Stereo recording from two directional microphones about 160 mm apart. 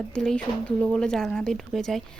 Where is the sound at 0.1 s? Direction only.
5° left (ahead or behind).